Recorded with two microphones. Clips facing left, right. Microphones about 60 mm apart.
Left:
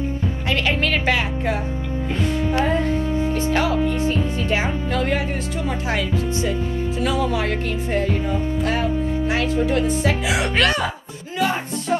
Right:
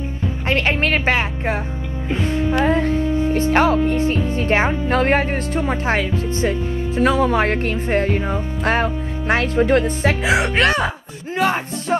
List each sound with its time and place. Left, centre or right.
0.5 s speech: right
2.5 s music: right
3.3 s speech: right